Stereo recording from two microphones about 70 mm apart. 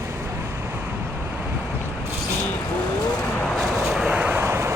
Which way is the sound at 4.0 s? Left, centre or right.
Centre.